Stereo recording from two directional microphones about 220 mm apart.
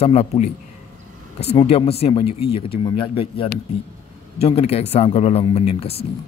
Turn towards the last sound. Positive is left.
turn(degrees=25)  # may be behind; listen again after turning